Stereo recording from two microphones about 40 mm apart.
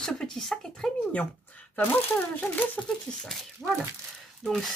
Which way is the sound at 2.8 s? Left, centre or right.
Left.